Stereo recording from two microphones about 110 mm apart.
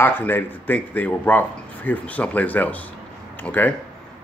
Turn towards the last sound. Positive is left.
turn(degrees=15)  # may be behind; listen again after turning